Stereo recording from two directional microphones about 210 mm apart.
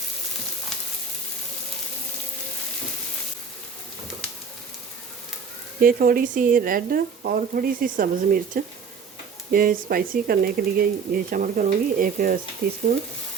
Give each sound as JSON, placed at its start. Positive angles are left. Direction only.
{"t": 5.8, "sound": "speech", "side_deg": -45}